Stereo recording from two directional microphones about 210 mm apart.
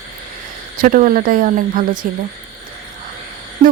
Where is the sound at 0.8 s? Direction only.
40° right (ahead or behind).